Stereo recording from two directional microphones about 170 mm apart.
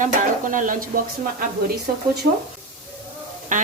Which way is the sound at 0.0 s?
50° right (ahead or behind).